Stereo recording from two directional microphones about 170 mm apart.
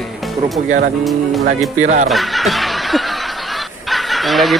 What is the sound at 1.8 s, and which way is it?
Speech, 45° right (ahead or behind).